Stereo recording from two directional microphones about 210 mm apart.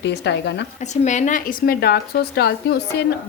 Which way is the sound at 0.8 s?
35° left (ahead or behind).